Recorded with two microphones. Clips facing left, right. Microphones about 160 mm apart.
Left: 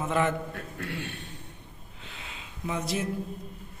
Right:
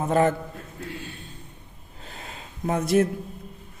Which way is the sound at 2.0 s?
40° right (ahead or behind).